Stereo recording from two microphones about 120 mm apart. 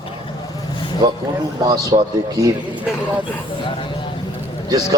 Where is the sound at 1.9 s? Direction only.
50° right (ahead or behind).